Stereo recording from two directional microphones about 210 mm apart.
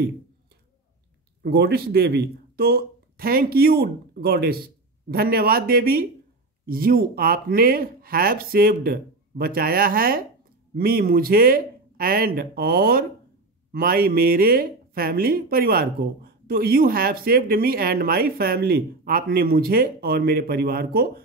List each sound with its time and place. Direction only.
1.4 s speech: 50° right (ahead or behind)